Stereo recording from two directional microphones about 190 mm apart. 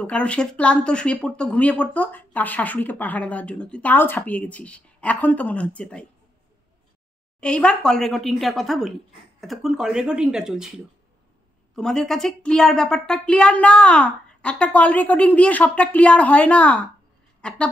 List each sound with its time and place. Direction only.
0.0 s speech: 5° left (ahead or behind)
7.3 s speech: 5° left (ahead or behind)
11.7 s a woman's voice: 5° left (ahead or behind)